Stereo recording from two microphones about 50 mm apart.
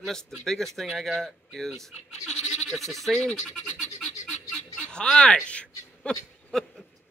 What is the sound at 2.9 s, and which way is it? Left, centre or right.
Speech, centre.